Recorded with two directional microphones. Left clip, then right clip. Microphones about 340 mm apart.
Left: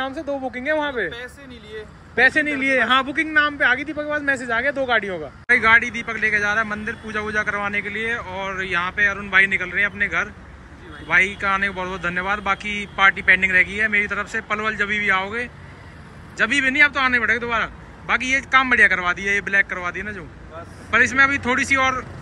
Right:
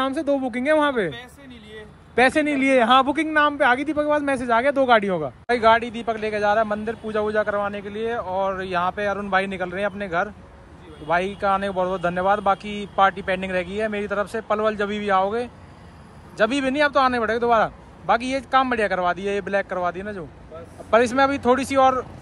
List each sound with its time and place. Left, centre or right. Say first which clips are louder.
0.0 s speech: right 3 dB; centre
2.1 s speech: left 1 dB; centre
11.4 s speech: even; centre
16.7 s speech: left 2 dB; centre